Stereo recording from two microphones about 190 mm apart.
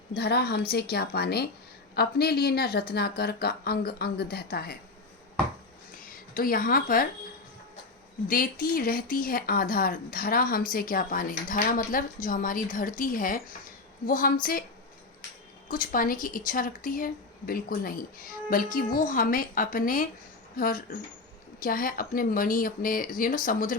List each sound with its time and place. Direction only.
0.1 s speech: 60° left (ahead or behind)
6.1 s a woman's voice: 50° left (ahead or behind)
8.3 s speech: 50° left (ahead or behind)
15.7 s speech: 45° left (ahead or behind)